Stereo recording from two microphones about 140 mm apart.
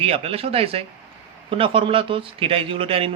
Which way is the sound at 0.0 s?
45° right (ahead or behind).